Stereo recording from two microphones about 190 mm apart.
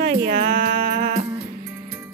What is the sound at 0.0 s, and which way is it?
Music, 60° right (ahead or behind).